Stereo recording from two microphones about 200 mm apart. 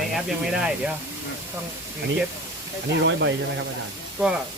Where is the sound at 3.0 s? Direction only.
65° right (ahead or behind).